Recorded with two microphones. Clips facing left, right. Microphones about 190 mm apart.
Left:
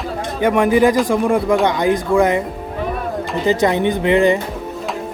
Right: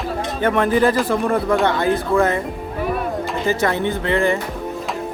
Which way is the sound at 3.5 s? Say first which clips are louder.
Left 5 dB; 20° left (ahead or behind).